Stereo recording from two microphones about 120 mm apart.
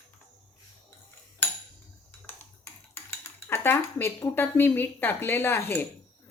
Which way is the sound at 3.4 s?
20° left (ahead or behind).